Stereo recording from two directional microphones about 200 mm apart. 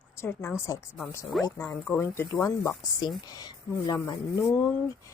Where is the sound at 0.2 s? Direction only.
10° left (ahead or behind).